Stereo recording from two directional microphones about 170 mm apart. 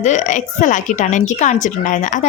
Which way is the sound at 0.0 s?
45° left (ahead or behind).